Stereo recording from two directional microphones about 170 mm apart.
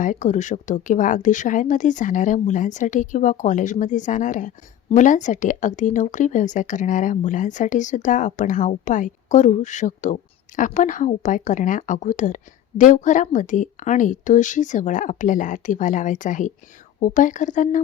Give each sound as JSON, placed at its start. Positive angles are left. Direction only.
{"t": 0.0, "sound": "speech", "side_deg": 45}